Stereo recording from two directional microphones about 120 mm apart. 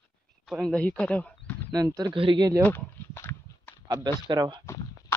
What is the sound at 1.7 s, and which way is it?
Speech, 30° right (ahead or behind).